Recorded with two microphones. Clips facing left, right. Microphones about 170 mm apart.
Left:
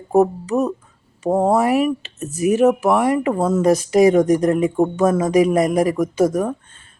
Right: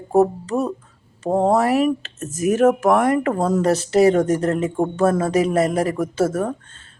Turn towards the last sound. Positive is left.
turn(degrees=15)  # may be behind; listen again after turning